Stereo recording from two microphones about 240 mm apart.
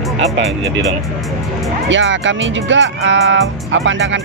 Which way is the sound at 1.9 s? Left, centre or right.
Right.